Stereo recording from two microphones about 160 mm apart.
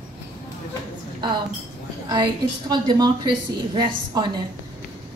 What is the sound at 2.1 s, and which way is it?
A woman's voice, 25° right (ahead or behind).